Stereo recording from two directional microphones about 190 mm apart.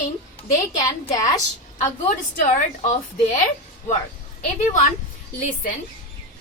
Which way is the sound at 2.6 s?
35° left (ahead or behind).